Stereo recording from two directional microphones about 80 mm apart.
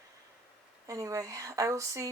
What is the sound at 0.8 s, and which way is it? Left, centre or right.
Speech, right.